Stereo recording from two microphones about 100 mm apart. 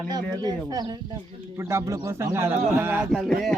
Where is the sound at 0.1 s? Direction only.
45° right (ahead or behind).